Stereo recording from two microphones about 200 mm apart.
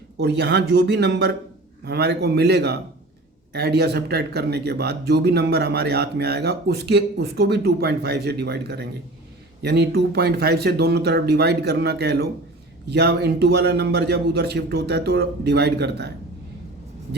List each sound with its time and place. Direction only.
0.2 s speech: 55° right (ahead or behind)